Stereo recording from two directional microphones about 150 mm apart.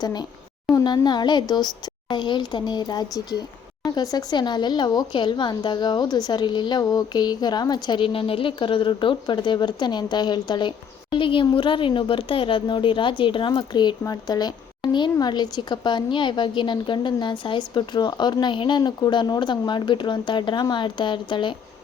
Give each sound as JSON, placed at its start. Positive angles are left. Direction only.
{"t": 0.0, "sound": "speech", "side_deg": 25}